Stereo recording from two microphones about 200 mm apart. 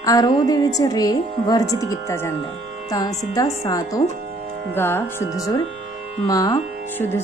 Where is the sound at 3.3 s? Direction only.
15° left (ahead or behind).